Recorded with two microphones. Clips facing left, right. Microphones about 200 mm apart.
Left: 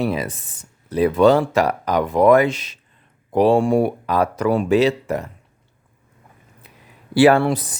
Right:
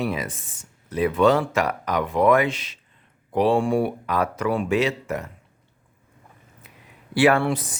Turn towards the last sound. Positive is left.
turn(degrees=40)  # may be behind; listen again after turning